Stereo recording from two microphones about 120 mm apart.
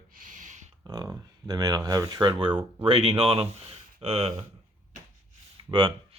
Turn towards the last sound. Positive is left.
turn(degrees=-45)  # may be behind; listen again after turning